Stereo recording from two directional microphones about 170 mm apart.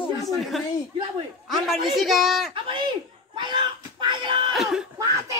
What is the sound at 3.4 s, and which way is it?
Speech, 30° right (ahead or behind).